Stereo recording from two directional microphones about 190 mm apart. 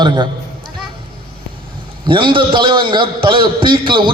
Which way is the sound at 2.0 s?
25° right (ahead or behind).